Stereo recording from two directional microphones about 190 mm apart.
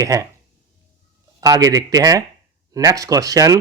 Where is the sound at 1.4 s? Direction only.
20° right (ahead or behind).